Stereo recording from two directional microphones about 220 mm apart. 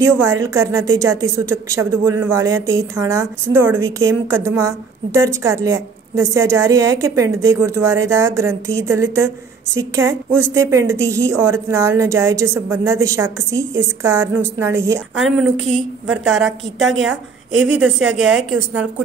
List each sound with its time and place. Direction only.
0.2 s a woman's voice: 15° right (ahead or behind)
15.1 s a woman's voice: centre (ahead or behind)
18.2 s a woman's voice: 5° right (ahead or behind)